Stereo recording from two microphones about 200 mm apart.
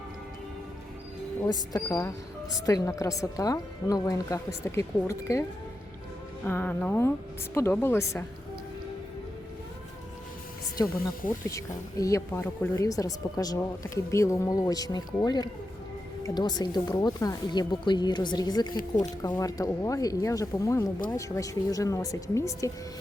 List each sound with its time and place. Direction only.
1.7 s a woman's voice: 15° left (ahead or behind)
10.8 s a woman's voice: 15° left (ahead or behind)
18.7 s speech: 45° left (ahead or behind)
19.2 s a woman's voice: 15° left (ahead or behind)